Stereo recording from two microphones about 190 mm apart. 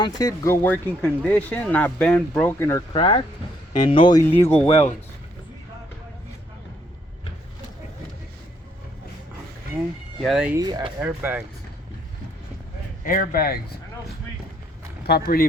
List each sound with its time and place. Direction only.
0.0 s speech: 20° left (ahead or behind)
3.0 s speech: 30° left (ahead or behind)
4.3 s speech: 10° left (ahead or behind)
10.2 s speech: 5° right (ahead or behind)
10.5 s speech: 20° right (ahead or behind)
11.0 s speech: 10° right (ahead or behind)
13.1 s speech: 50° left (ahead or behind)
15.0 s speech: 55° left (ahead or behind)